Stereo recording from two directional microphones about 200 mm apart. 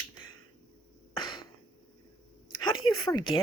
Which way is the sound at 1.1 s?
20° left (ahead or behind).